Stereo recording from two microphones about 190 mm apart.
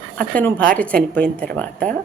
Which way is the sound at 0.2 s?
5° left (ahead or behind).